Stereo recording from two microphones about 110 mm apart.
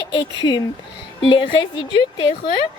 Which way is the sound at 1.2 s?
50° left (ahead or behind).